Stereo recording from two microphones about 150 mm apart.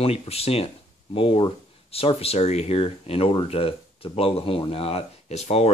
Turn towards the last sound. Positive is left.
turn(degrees=45)  # may be behind; listen again after turning